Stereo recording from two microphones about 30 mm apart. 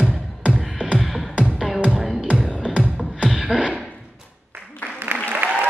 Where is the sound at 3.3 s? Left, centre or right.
Centre.